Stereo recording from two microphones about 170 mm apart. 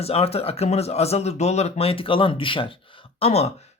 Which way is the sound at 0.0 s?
35° left (ahead or behind).